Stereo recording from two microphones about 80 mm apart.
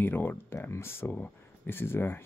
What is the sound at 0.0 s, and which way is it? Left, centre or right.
Speech, left.